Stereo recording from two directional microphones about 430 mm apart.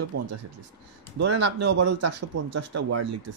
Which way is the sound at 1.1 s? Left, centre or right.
Right.